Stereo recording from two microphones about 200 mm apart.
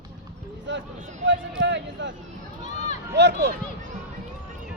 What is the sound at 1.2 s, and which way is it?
Speech, 60° right (ahead or behind).